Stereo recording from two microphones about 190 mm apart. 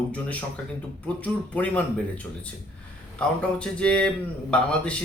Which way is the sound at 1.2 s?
5° left (ahead or behind).